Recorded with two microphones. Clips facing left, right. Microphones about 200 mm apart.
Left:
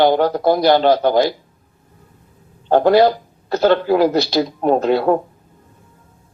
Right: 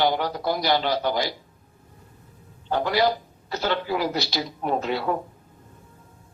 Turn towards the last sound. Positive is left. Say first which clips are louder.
# left 10 dB
turn(degrees=55)  # may be behind; listen again after turning